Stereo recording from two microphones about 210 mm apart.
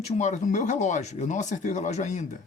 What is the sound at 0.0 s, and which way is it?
Speech, 35° left (ahead or behind).